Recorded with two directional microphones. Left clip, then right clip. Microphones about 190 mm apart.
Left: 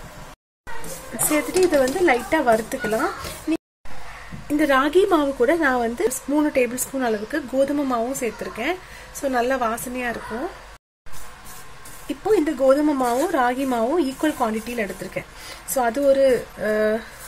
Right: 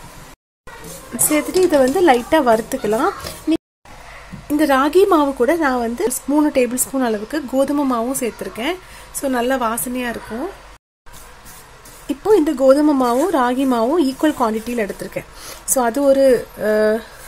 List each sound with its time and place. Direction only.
1.3 s a woman's voice: 20° right (ahead or behind)
12.1 s a woman's voice: 15° right (ahead or behind)